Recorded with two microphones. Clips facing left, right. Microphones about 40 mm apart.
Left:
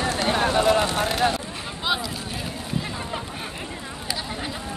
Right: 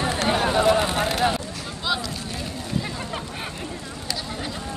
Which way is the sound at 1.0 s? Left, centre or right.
Centre.